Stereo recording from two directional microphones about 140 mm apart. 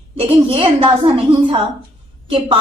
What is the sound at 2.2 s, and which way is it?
Speech, 40° right (ahead or behind).